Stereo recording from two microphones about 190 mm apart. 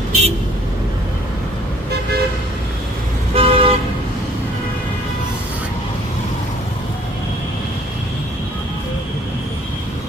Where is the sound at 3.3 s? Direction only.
30° right (ahead or behind).